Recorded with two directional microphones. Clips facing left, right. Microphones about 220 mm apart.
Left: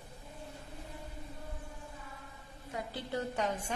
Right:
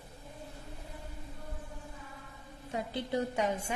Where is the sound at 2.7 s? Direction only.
20° right (ahead or behind).